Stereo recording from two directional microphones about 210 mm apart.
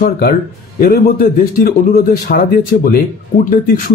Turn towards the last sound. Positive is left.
turn(degrees=40)  # may be behind; listen again after turning